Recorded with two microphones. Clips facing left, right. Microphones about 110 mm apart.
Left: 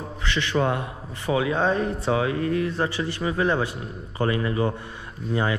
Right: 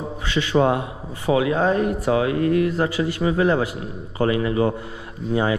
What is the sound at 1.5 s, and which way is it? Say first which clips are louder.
Speech: right 3 dB; 45° right (ahead or behind).